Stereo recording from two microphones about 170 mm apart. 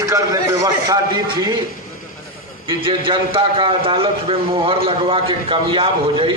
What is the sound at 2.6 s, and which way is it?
A man's voice, 30° right (ahead or behind).